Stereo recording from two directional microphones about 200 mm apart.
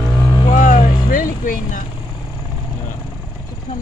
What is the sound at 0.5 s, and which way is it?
Vehicle, 40° left (ahead or behind).